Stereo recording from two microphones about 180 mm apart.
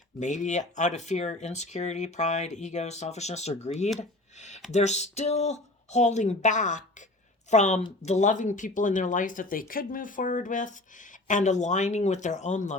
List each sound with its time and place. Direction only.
0.2 s speech: 45° left (ahead or behind)